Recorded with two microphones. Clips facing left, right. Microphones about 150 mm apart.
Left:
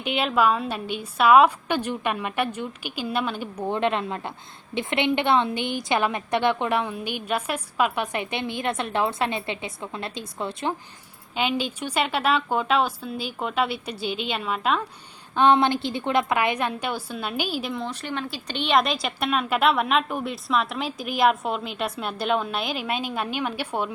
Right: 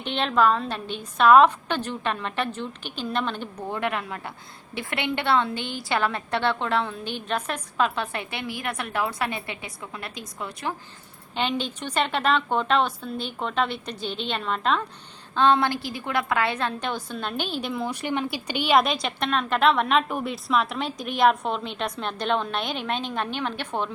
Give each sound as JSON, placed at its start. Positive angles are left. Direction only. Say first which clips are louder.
{"t": 0.0, "sound": "a woman's voice", "louder": "even", "side_deg": 5}
{"t": 3.7, "sound": "a woman's voice", "louder": "left 4 dB", "side_deg": 25}
{"t": 11.3, "sound": "a woman's voice", "louder": "left 1 dB", "side_deg": 5}
{"t": 15.4, "sound": "a woman's voice", "louder": "left 2 dB", "side_deg": 20}